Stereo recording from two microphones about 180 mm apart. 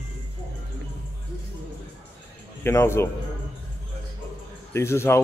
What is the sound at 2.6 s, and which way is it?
Speech, 15° left (ahead or behind).